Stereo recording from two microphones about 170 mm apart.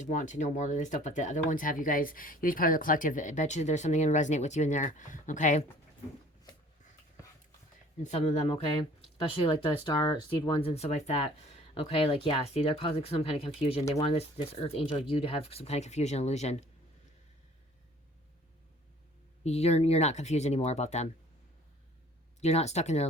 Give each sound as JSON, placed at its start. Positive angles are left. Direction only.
{"t": 0.0, "sound": "speech", "side_deg": 45}
{"t": 8.0, "sound": "speech", "side_deg": 40}
{"t": 19.5, "sound": "speech", "side_deg": 40}
{"t": 22.4, "sound": "speech", "side_deg": 40}